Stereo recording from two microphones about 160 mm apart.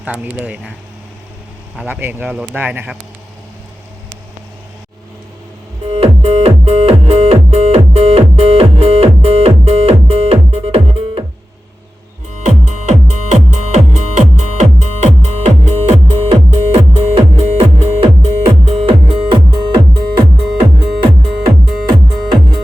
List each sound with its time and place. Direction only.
0.0 s speech: 10° right (ahead or behind)
1.7 s speech: 10° right (ahead or behind)
6.0 s music: 40° right (ahead or behind)
13.1 s music: 45° right (ahead or behind); by 22.6 s 30° right (ahead or behind)